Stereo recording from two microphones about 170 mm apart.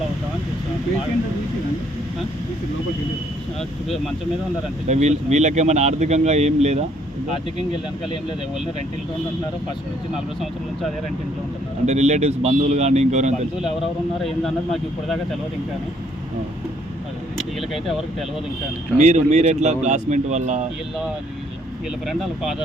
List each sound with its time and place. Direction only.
3.8 s speech: centre (ahead or behind)
4.9 s speech: 40° right (ahead or behind)
7.7 s speech: 30° left (ahead or behind)
11.9 s speech: 40° right (ahead or behind)
14.2 s speech: centre (ahead or behind)
17.3 s a sound: centre (ahead or behind)
18.9 s speech: 40° right (ahead or behind)
22.0 s speech: centre (ahead or behind)